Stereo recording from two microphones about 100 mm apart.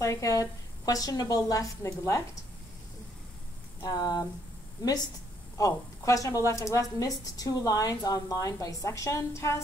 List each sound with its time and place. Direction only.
0.0 s a woman's voice: 35° left (ahead or behind)
3.8 s a woman's voice: 40° left (ahead or behind)
5.6 s a woman's voice: 35° left (ahead or behind)